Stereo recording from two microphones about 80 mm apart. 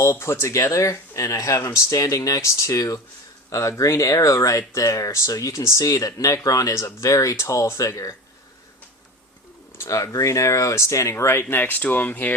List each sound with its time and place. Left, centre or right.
0.0 s speech: left
9.7 s speech: left